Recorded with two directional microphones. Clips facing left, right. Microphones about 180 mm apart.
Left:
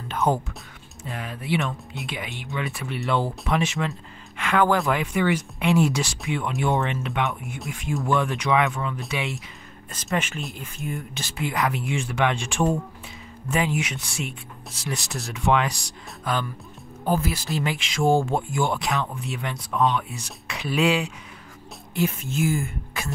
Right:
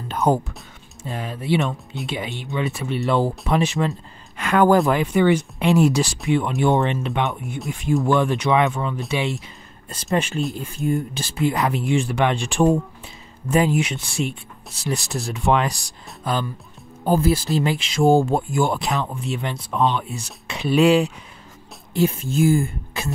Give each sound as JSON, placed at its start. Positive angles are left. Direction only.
{"t": 0.1, "sound": "music", "side_deg": -40}
{"t": 1.0, "sound": "speech", "side_deg": -30}
{"t": 7.2, "sound": "speech", "side_deg": 0}
{"t": 8.1, "sound": "speech", "side_deg": -30}
{"t": 10.1, "sound": "speech", "side_deg": -30}